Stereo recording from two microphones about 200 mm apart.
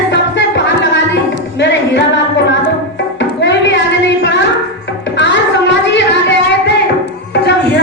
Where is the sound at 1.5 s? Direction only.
65° left (ahead or behind).